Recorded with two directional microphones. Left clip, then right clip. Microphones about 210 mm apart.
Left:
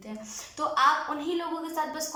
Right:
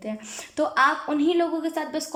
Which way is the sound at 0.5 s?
40° right (ahead or behind).